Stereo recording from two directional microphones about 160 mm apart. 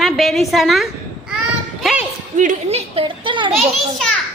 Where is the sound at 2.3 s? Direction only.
50° right (ahead or behind); by 3.5 s 30° right (ahead or behind).